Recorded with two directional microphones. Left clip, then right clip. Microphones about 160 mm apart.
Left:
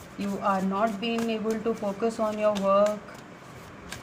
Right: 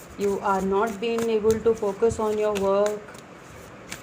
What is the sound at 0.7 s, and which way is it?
Speech, 25° right (ahead or behind).